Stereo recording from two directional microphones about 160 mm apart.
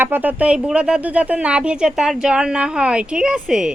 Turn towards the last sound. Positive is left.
turn(degrees=-5)  # may be behind; listen again after turning